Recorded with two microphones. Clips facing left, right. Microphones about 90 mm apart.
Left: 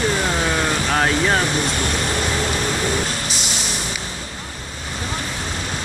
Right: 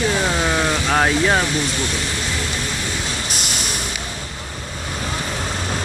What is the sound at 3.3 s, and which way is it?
Vehicle, 55° right (ahead or behind).